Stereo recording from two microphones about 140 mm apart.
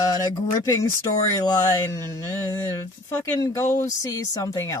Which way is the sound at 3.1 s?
20° left (ahead or behind).